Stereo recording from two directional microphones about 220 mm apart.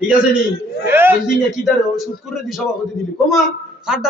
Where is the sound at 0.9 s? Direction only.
10° right (ahead or behind).